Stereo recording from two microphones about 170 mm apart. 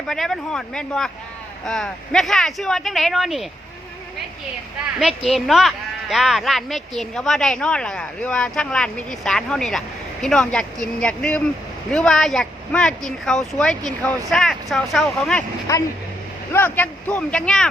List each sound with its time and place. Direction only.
0.1 s speech: centre (ahead or behind)
4.9 s speech: centre (ahead or behind)
15.7 s speech: 20° left (ahead or behind)